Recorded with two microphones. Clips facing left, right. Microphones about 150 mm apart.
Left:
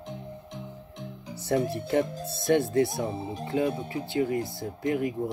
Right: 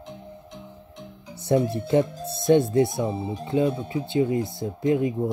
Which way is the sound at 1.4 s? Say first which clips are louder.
Right 4 dB; 20° right (ahead or behind).